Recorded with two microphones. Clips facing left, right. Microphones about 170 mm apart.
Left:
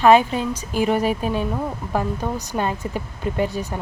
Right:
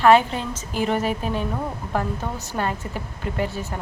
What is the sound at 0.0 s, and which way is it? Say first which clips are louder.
Speech: left 2 dB; 15° left (ahead or behind).